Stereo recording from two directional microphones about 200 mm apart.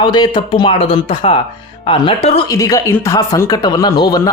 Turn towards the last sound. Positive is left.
turn(degrees=20)  # may be behind; listen again after turning